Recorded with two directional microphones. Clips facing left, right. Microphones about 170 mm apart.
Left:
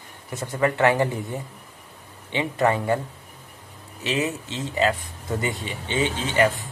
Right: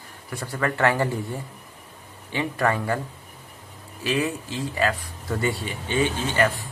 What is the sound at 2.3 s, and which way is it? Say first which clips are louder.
Speech: left 2 dB; 20° left (ahead or behind).